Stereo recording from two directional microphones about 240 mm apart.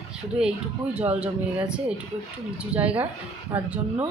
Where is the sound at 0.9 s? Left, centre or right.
Centre.